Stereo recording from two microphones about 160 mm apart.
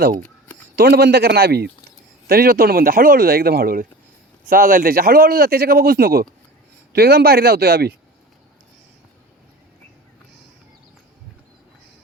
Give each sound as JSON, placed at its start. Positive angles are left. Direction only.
{"t": 0.8, "sound": "speech", "side_deg": -75}
{"t": 2.2, "sound": "speech", "side_deg": -70}